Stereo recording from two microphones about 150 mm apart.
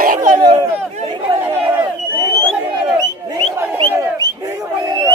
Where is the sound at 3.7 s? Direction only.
15° right (ahead or behind).